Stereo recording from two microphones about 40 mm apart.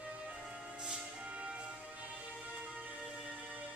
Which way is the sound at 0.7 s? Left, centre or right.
Right.